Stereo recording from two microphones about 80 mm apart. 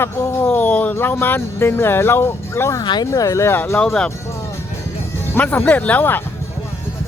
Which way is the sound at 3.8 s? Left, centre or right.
Centre.